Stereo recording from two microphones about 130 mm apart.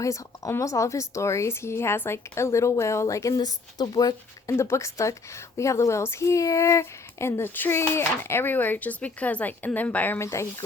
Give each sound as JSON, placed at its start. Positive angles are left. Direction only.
{"t": 0.0, "sound": "a woman's voice", "side_deg": 25}